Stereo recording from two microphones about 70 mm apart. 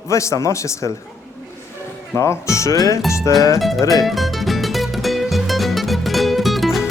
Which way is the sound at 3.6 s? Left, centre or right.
Centre.